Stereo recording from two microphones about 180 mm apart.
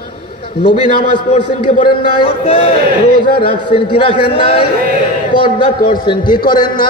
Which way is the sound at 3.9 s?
30° left (ahead or behind).